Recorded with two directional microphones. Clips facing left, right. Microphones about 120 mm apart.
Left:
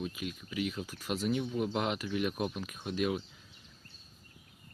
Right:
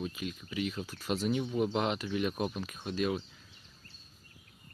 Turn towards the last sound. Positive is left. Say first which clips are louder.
# even
turn(degrees=10)  # may be behind; listen again after turning